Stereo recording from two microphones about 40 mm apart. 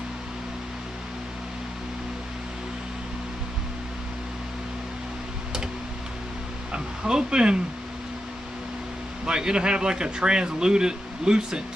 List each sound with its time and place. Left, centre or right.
6.7 s speech: right
9.2 s speech: centre